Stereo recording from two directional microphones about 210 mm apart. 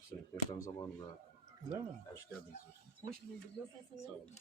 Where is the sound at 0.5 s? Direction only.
15° left (ahead or behind).